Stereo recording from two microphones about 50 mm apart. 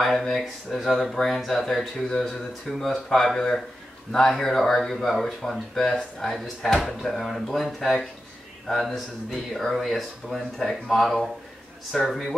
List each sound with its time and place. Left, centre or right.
0.0 s speech: centre
6.3 s speech: centre